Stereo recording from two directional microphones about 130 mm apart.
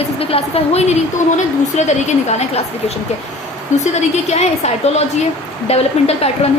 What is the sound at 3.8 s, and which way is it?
A woman's voice, 60° left (ahead or behind).